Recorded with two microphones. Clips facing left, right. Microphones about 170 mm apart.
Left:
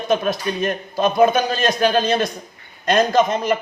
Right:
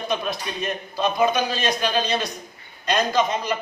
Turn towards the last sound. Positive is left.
turn(degrees=50)  # may be behind; listen again after turning